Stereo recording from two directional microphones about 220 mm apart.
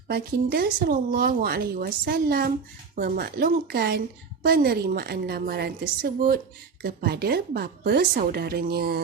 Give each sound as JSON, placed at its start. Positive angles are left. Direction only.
{"t": 0.1, "sound": "speech", "side_deg": -45}